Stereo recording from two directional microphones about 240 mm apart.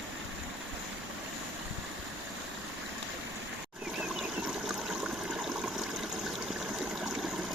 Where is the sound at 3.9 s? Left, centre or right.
Centre.